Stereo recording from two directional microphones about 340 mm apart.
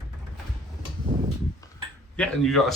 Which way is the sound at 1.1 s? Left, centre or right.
Centre.